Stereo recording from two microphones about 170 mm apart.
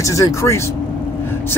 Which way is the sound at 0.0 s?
20° left (ahead or behind).